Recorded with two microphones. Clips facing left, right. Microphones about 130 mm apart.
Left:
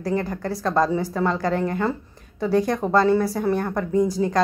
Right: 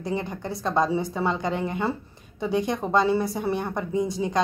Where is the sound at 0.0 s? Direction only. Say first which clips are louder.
Left 4 dB; 20° right (ahead or behind).